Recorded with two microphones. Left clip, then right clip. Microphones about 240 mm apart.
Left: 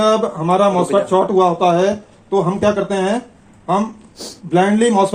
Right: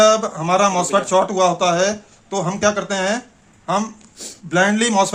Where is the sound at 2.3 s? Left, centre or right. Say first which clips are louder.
Left 3 dB; right.